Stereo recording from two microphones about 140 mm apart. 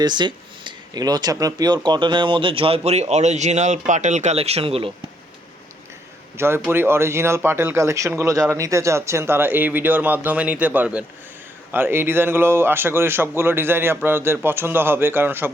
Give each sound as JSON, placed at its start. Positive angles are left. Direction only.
{"t": 0.0, "sound": "speech", "side_deg": -30}
{"t": 6.3, "sound": "a man's voice", "side_deg": -15}